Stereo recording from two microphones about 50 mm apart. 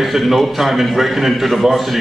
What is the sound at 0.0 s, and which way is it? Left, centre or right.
A man's voice, centre.